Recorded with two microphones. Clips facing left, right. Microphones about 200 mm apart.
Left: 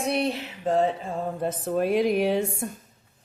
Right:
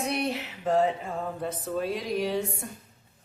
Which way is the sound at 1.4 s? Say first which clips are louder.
Left 7 dB; 50° left (ahead or behind).